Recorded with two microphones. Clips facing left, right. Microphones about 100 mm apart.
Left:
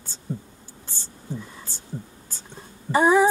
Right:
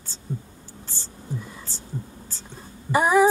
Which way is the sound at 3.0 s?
15° right (ahead or behind).